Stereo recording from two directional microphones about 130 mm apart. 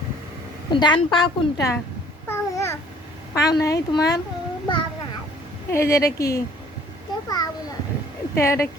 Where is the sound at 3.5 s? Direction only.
30° left (ahead or behind).